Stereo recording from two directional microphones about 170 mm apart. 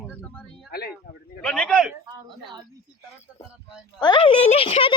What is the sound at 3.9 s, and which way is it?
Speech, 25° left (ahead or behind).